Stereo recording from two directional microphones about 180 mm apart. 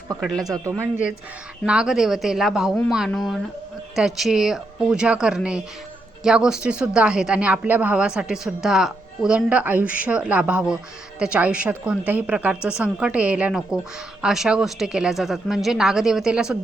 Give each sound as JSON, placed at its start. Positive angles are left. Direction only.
{"t": 0.2, "sound": "speech", "side_deg": 5}
{"t": 0.4, "sound": "speech", "side_deg": -20}
{"t": 1.6, "sound": "a woman's voice", "side_deg": -5}